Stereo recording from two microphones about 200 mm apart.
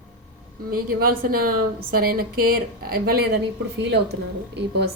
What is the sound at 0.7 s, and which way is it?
A woman's voice, 45° right (ahead or behind).